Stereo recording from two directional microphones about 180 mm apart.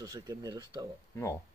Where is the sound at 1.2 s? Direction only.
15° left (ahead or behind).